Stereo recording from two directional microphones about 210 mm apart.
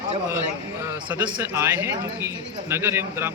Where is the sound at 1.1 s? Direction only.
5° right (ahead or behind).